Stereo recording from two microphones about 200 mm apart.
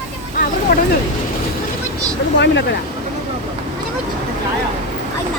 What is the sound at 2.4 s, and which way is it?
Speech, 60° left (ahead or behind).